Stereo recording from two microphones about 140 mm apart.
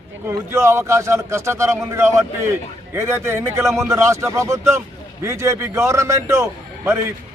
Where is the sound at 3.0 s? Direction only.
20° right (ahead or behind).